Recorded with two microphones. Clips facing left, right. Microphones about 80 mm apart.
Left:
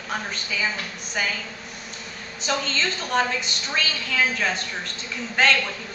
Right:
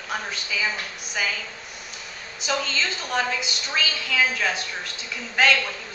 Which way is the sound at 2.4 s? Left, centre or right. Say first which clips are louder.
Left 1 dB; centre.